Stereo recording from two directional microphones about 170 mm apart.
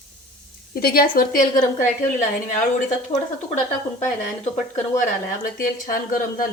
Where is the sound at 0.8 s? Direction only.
60° left (ahead or behind).